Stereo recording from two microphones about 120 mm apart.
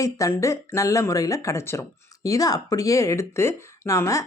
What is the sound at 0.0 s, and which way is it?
Speech, 25° left (ahead or behind).